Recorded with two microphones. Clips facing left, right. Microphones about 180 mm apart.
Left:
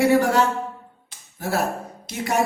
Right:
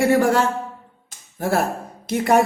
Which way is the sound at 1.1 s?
50° right (ahead or behind).